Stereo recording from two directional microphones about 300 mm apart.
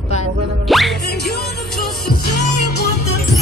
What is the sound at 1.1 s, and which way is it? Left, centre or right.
Music, left.